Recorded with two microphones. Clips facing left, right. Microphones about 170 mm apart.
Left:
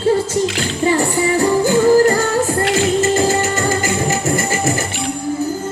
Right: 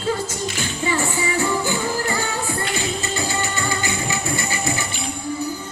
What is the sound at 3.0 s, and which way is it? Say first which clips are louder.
Music: left 11 dB; 45° left (ahead or behind).